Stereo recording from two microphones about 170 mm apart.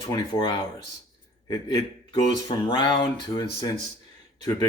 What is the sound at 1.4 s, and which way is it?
Speech, 25° left (ahead or behind).